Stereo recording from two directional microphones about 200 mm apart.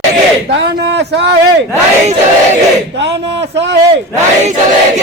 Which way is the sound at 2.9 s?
60° right (ahead or behind).